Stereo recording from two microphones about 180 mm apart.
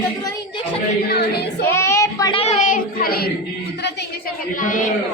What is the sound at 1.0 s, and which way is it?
Speech, 65° left (ahead or behind).